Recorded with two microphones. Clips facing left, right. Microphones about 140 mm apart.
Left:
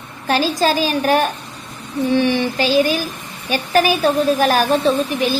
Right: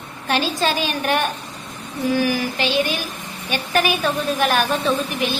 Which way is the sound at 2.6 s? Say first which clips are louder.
Left 5 dB; 40° left (ahead or behind).